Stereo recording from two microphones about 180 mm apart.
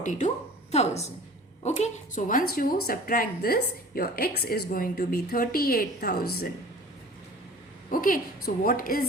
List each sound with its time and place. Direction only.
0.0 s a woman's voice: 45° left (ahead or behind)
7.9 s a woman's voice: 50° left (ahead or behind)